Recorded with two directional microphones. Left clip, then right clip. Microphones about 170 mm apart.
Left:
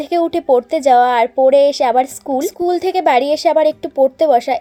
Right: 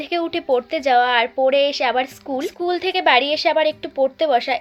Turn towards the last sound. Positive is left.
turn(degrees=55)  # may be behind; listen again after turning